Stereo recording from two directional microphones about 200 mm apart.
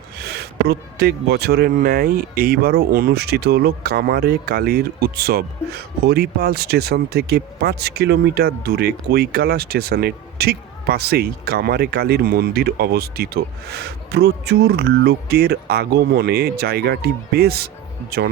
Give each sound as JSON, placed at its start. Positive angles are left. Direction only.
{"t": 0.2, "sound": "speech", "side_deg": -55}